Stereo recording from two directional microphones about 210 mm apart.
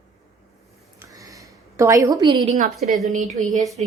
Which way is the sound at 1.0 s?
15° right (ahead or behind).